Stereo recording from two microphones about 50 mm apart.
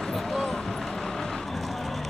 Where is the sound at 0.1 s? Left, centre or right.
Centre.